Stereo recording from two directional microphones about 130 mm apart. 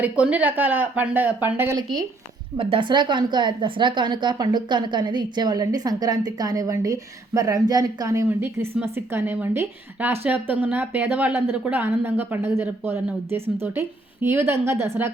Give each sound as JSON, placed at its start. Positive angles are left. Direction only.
{"t": 0.0, "sound": "a woman's voice", "side_deg": -10}
{"t": 2.6, "sound": "a woman's voice", "side_deg": -40}